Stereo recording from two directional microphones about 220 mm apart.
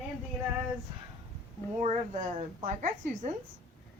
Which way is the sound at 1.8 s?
30° right (ahead or behind).